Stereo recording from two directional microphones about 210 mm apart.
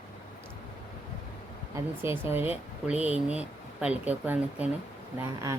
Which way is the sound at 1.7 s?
10° right (ahead or behind).